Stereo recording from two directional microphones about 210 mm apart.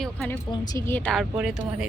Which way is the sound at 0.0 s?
5° left (ahead or behind).